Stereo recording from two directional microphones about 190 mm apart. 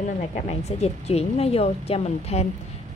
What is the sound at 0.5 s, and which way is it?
A woman's voice, 35° left (ahead or behind).